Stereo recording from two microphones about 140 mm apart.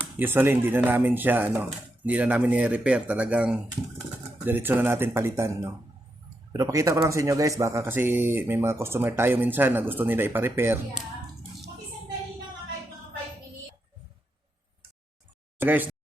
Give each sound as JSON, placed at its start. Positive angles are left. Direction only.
{"t": 0.0, "sound": "speech", "side_deg": -15}
{"t": 15.5, "sound": "speech", "side_deg": -15}